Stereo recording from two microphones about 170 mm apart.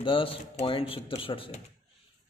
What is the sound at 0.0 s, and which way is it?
Speech, 30° left (ahead or behind).